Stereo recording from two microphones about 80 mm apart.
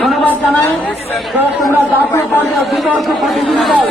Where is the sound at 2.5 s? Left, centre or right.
Centre.